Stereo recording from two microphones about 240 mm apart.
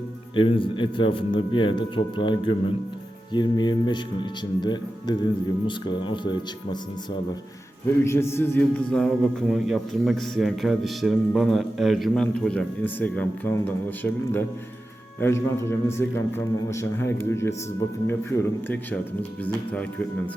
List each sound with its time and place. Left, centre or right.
0.3 s a man's voice: left
8.0 s a man's voice: centre